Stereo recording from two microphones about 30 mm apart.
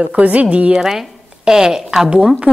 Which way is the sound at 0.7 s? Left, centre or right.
Centre.